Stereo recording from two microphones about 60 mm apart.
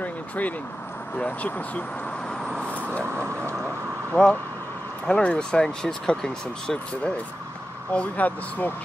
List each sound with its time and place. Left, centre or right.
0.0 s vehicle: left
1.1 s speech: left
2.2 s vehicle: centre
4.1 s speech: centre
7.9 s speech: left